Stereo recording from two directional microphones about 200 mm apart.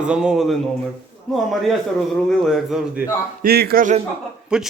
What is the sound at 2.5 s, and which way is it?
Speech, centre (ahead or behind).